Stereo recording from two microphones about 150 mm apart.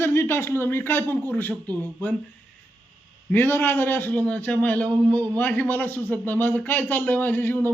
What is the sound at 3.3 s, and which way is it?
Speech, 15° left (ahead or behind).